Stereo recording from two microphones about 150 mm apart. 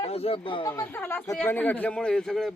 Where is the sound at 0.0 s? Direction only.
40° left (ahead or behind).